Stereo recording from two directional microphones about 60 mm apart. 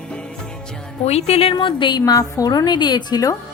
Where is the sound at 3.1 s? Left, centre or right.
Left.